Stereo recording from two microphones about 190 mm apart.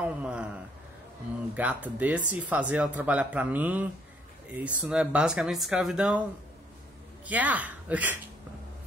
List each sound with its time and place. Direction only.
0.0 s a sound: 5° right (ahead or behind)
1.5 s speech: 5° right (ahead or behind)
7.2 s speech: 10° right (ahead or behind)